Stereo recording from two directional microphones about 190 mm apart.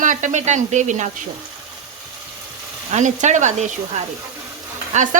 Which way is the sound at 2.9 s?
40° right (ahead or behind).